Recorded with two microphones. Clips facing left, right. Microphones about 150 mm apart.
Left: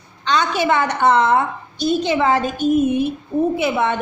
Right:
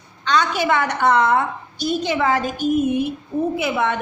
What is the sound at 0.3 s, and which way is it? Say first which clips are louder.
A woman's voice: left 1 dB; 25° left (ahead or behind).